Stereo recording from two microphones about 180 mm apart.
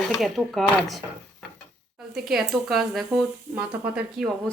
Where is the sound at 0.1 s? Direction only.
Centre (ahead or behind).